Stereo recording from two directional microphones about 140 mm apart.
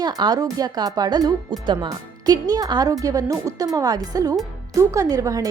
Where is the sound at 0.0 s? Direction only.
30° right (ahead or behind).